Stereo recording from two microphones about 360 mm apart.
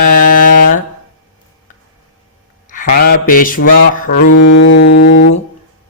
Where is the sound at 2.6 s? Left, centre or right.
Left.